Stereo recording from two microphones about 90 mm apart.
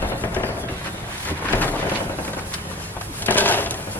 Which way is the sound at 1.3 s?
20° left (ahead or behind).